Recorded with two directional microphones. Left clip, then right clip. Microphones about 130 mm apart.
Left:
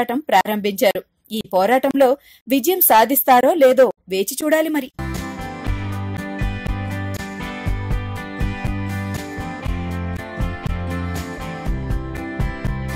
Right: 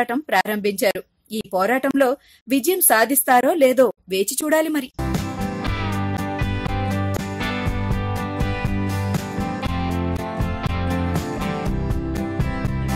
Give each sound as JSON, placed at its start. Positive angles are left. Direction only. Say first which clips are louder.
{"t": 0.0, "sound": "a woman's voice", "louder": "left 3 dB", "side_deg": 15}
{"t": 9.8, "sound": "music", "louder": "right 4 dB", "side_deg": -60}